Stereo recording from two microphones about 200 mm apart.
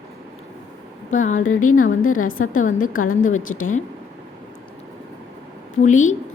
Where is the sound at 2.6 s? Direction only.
45° left (ahead or behind).